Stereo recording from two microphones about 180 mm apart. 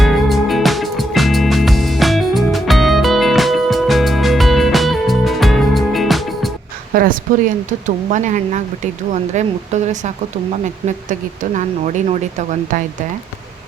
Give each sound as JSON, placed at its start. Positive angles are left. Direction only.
{"t": 0.0, "sound": "music", "side_deg": 0}
{"t": 6.9, "sound": "a woman's voice", "side_deg": -55}